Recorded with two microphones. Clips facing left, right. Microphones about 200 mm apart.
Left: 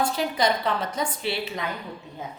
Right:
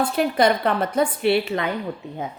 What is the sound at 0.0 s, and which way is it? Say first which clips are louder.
A woman's voice: right 5 dB; 60° right (ahead or behind).